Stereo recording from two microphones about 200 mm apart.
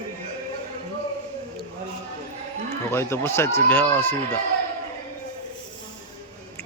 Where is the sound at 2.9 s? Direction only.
10° left (ahead or behind).